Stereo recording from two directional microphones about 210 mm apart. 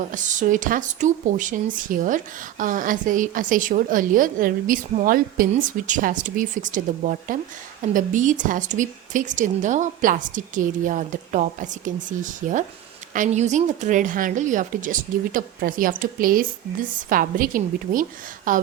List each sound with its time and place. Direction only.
0.0 s speech: 35° right (ahead or behind)